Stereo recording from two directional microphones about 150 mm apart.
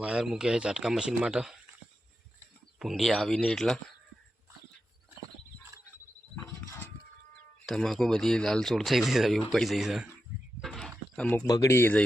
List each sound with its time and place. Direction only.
0.0 s speech: 5° right (ahead or behind)
2.7 s speech: centre (ahead or behind)
6.7 s a sound: 15° left (ahead or behind)
7.6 s speech: centre (ahead or behind)
10.6 s a sound: centre (ahead or behind)
11.4 s speech: 20° left (ahead or behind)